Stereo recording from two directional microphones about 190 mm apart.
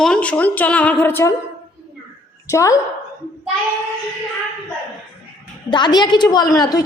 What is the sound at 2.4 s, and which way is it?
Speech, 15° left (ahead or behind).